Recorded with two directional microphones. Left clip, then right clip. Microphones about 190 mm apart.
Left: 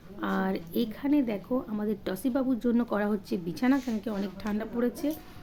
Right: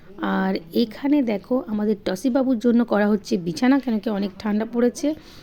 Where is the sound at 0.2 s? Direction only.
35° right (ahead or behind).